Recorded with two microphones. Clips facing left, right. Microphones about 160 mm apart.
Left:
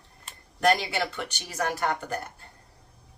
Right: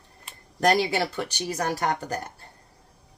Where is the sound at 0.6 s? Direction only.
40° right (ahead or behind).